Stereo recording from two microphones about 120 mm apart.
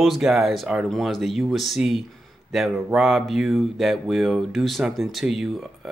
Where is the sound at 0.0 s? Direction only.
Centre (ahead or behind).